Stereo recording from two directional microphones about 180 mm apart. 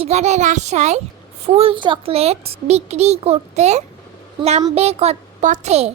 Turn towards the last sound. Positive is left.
turn(degrees=-35)  # may be behind; listen again after turning